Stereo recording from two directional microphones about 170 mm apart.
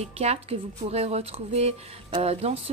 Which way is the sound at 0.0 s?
40° right (ahead or behind).